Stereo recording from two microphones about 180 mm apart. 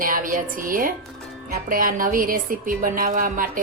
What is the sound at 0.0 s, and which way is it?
Speech, 50° right (ahead or behind).